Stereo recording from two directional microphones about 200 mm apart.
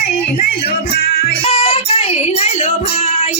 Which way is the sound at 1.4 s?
30° left (ahead or behind).